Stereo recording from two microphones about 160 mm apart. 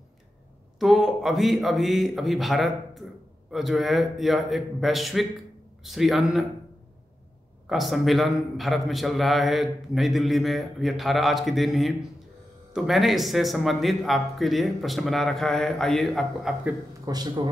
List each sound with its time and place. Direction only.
0.7 s a man's voice: centre (ahead or behind)
7.6 s a man's voice: centre (ahead or behind)
17.0 s speech: 25° right (ahead or behind)